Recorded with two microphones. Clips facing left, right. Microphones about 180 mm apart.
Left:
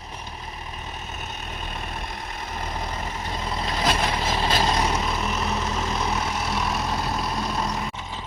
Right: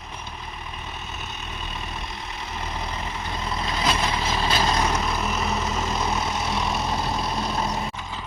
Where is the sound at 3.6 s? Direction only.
40° left (ahead or behind).